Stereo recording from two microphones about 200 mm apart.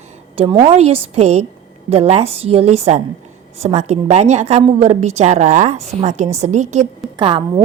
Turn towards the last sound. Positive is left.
turn(degrees=-25)  # may be behind; listen again after turning